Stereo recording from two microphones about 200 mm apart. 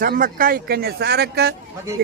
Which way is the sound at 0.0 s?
45° right (ahead or behind).